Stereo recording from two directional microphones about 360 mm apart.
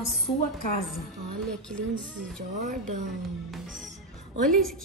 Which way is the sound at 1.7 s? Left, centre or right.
Right.